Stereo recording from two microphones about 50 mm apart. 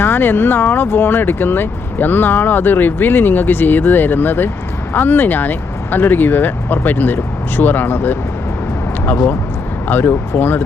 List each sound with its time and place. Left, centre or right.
0.0 s speech: left
9.9 s speech: left